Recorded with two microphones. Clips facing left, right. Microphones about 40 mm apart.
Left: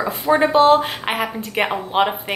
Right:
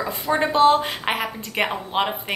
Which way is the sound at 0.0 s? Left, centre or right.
Centre.